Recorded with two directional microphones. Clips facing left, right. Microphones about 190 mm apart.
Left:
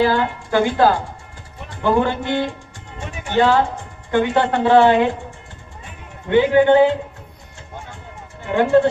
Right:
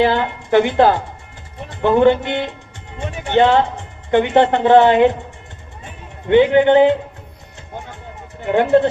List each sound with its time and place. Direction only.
0.0 s speech: 25° right (ahead or behind)
6.3 s speech: 20° right (ahead or behind)
8.4 s speech: 20° right (ahead or behind)